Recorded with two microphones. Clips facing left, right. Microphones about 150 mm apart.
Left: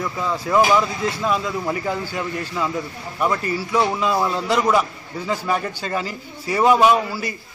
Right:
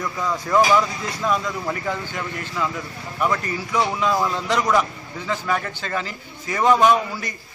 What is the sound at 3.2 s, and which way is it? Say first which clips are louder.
A man's voice: left 2 dB; 10° left (ahead or behind).